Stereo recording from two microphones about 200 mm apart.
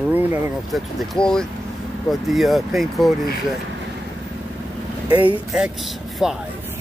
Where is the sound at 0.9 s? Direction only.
5° left (ahead or behind).